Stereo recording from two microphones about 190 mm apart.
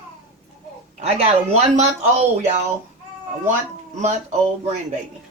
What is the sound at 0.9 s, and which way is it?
Speech, 35° right (ahead or behind).